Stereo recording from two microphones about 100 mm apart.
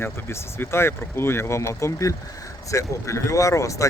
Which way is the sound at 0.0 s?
25° left (ahead or behind).